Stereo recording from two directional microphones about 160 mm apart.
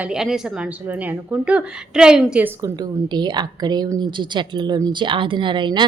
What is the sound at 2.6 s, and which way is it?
A woman's voice, 25° right (ahead or behind).